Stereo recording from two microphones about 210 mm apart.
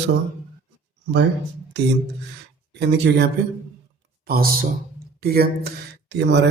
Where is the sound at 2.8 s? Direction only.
55° right (ahead or behind).